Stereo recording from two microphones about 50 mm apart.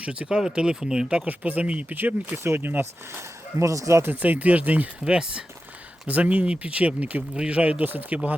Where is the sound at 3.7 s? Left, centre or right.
Right.